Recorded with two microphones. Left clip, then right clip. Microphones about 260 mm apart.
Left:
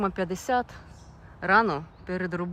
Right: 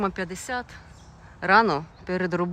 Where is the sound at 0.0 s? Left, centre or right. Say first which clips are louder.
Even; centre.